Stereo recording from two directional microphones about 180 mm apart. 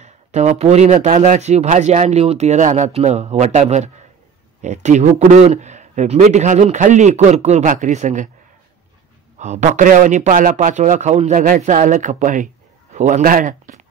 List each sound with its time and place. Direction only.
0.0 s speech: 40° right (ahead or behind)
9.4 s a man's voice: 40° right (ahead or behind)